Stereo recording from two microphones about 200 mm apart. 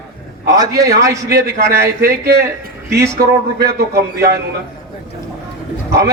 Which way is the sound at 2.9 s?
15° right (ahead or behind).